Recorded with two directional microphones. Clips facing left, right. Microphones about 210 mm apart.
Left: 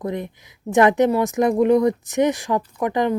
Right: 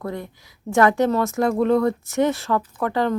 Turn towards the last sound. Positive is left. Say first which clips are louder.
# left 1 dB
turn(degrees=15)  # may be behind; listen again after turning